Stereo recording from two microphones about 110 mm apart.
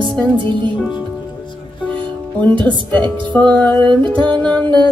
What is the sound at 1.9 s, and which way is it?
Music, 45° right (ahead or behind).